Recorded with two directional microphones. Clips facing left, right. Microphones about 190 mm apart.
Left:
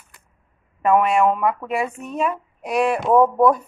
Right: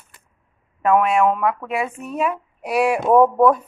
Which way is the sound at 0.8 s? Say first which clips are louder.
Even; centre (ahead or behind).